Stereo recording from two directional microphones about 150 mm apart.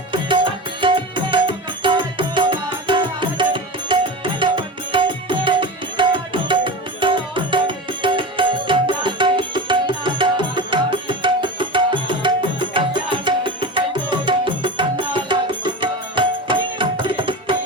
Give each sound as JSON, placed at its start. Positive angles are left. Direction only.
{"t": 0.1, "sound": "tabla", "side_deg": -35}